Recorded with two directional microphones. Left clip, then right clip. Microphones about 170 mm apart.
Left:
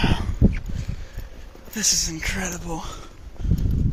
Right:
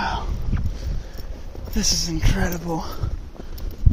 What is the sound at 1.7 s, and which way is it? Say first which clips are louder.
Speech: even; 5° right (ahead or behind).